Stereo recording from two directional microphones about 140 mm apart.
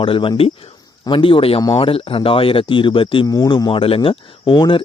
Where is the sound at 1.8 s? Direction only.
40° left (ahead or behind).